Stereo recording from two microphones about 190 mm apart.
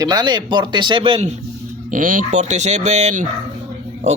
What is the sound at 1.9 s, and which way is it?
Speech, 45° right (ahead or behind).